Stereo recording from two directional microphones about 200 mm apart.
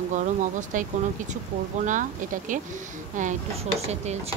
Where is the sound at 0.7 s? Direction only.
40° right (ahead or behind).